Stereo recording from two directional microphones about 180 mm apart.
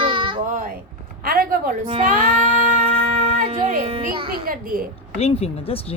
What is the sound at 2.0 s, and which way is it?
Child singing, 45° right (ahead or behind).